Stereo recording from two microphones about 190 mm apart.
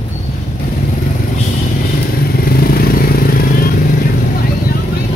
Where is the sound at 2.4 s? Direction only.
50° left (ahead or behind).